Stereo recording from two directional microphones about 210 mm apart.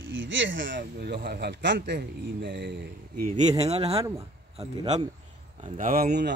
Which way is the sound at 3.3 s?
35° right (ahead or behind).